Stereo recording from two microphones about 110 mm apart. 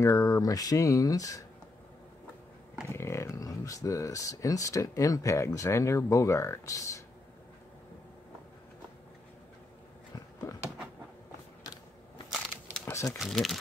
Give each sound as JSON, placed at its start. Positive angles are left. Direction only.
{"t": 0.0, "sound": "speech", "side_deg": 30}
{"t": 2.9, "sound": "speech", "side_deg": 25}
{"t": 10.4, "sound": "speech", "side_deg": 25}
{"t": 12.8, "sound": "crumpling", "side_deg": 25}
{"t": 13.2, "sound": "speech", "side_deg": 0}